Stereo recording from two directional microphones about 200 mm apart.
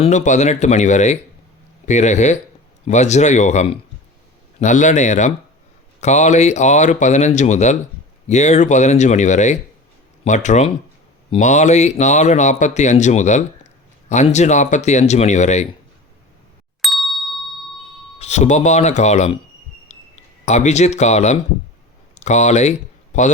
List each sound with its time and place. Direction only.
0.0 s speech: 35° left (ahead or behind)
16.8 s ding: centre (ahead or behind)
18.2 s speech: 35° left (ahead or behind)
19.9 s a sound: 35° left (ahead or behind)
20.4 s speech: 35° left (ahead or behind)